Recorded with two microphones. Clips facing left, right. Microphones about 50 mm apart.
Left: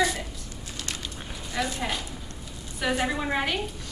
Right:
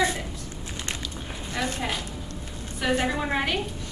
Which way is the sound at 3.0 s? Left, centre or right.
Centre.